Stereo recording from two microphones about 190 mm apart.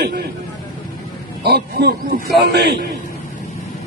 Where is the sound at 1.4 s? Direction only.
60° right (ahead or behind).